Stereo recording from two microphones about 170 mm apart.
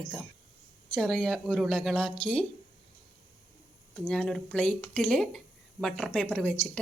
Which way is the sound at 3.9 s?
Centre (ahead or behind).